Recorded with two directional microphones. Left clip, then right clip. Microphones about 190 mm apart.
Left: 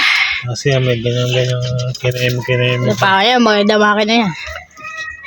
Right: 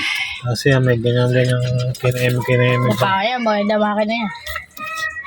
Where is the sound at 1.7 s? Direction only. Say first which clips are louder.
Left 2 dB; 10° right (ahead or behind).